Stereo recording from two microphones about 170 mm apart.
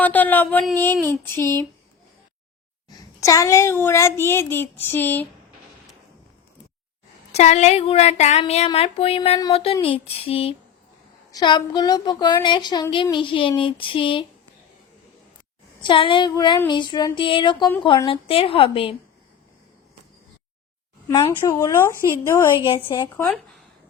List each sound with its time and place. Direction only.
0.0 s speech: 10° left (ahead or behind)
3.2 s speech: 20° left (ahead or behind)
7.3 s a woman's voice: 40° left (ahead or behind)
15.8 s a woman's voice: 30° left (ahead or behind)
21.1 s speech: 20° left (ahead or behind)
22.5 s speech: 30° left (ahead or behind)
22.8 s speech: 15° left (ahead or behind)